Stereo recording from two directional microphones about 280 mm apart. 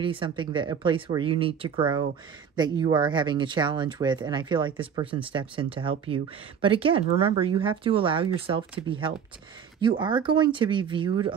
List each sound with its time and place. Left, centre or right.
0.0 s speech: centre